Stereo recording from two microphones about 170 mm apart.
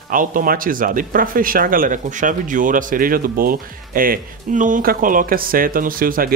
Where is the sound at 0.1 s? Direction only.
55° right (ahead or behind).